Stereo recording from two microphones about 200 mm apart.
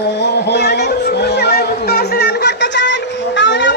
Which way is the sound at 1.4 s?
55° left (ahead or behind).